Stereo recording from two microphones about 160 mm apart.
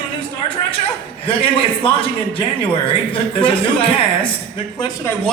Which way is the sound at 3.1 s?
35° left (ahead or behind).